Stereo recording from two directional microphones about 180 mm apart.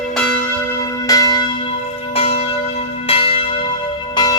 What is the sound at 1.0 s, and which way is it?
Church bell, 20° left (ahead or behind).